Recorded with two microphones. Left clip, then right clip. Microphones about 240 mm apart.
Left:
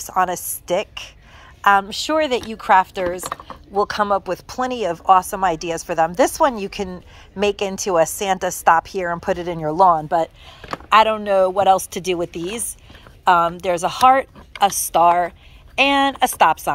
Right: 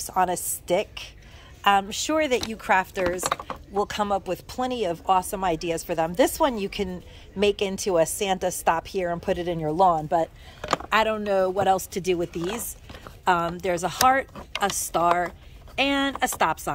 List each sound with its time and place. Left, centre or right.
0.0 s a woman's voice: centre
12.4 s speech: right
13.2 s speech: centre